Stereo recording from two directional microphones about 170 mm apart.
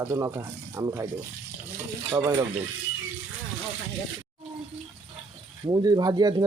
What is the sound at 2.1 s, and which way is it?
Speech, 15° right (ahead or behind).